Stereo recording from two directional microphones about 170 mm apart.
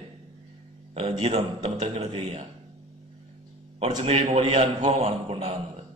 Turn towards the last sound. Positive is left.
turn(degrees=-40)  # may be behind; listen again after turning